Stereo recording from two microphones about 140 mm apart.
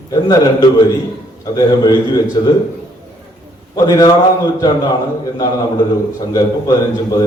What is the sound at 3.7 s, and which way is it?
Speech, 25° left (ahead or behind).